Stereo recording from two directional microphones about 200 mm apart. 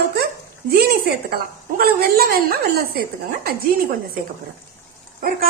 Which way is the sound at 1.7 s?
50° right (ahead or behind).